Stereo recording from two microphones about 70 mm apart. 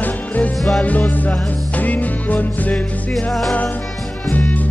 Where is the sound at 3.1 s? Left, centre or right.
Centre.